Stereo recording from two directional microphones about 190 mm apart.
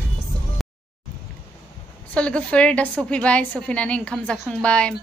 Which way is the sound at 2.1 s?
5° left (ahead or behind).